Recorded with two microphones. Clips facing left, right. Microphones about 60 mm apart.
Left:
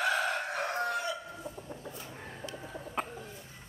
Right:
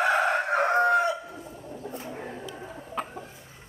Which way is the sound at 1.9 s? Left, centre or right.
Right.